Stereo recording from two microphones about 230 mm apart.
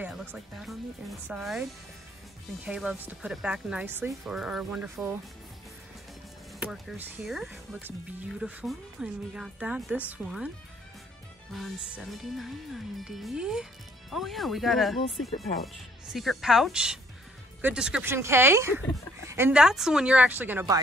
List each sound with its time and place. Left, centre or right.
0.0 s speech: centre
6.6 s speech: centre
11.5 s speech: centre